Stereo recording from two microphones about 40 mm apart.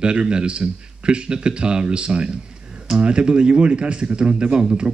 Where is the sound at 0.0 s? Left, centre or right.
Right.